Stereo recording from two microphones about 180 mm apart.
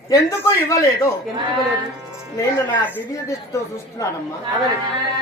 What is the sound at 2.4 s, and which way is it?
A man's voice, 10° left (ahead or behind).